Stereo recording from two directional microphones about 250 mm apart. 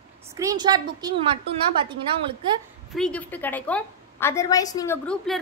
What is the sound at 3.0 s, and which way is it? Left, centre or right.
A woman's voice, centre.